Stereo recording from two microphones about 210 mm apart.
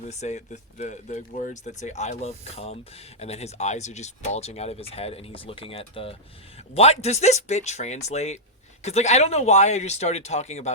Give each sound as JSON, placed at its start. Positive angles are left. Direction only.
{"t": 0.1, "sound": "speech", "side_deg": 35}